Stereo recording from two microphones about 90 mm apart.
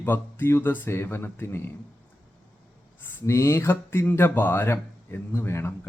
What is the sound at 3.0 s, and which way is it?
Speech, 30° left (ahead or behind).